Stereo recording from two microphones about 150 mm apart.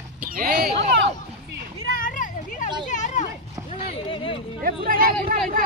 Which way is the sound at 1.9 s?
65° left (ahead or behind).